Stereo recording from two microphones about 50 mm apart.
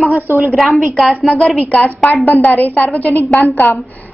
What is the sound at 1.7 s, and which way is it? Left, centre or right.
A woman's voice, left.